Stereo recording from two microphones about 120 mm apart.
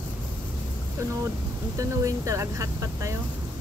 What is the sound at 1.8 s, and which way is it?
Speech, 25° right (ahead or behind).